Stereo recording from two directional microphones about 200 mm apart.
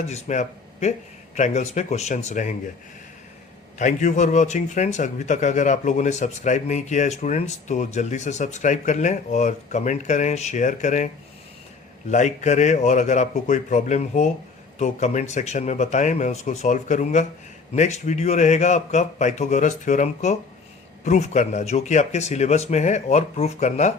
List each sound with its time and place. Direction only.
0.1 s speech: 35° left (ahead or behind)
3.8 s speech: 40° left (ahead or behind)
12.1 s speech: 35° left (ahead or behind)